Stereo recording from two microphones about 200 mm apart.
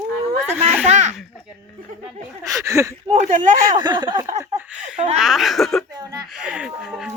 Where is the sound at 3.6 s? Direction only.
20° right (ahead or behind).